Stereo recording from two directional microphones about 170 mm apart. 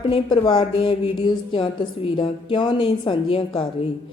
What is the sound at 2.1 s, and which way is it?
A woman's voice, 30° left (ahead or behind).